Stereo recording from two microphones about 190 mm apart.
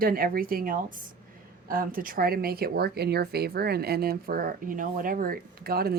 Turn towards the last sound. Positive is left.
turn(degrees=-55)  # may be behind; listen again after turning